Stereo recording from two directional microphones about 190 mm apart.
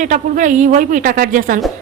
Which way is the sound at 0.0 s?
40° right (ahead or behind).